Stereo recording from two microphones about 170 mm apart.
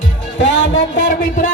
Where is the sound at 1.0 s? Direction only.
50° left (ahead or behind).